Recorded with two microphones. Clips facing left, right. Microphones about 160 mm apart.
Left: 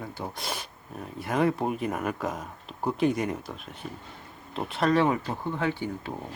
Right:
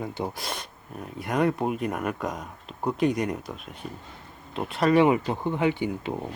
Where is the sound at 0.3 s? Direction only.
5° left (ahead or behind).